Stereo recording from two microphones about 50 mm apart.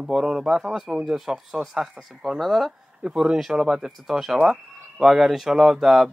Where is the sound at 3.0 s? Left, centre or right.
Centre.